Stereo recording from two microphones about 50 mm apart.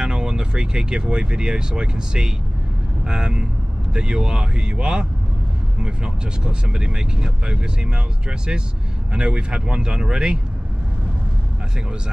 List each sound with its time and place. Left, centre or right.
0.0 s speech: centre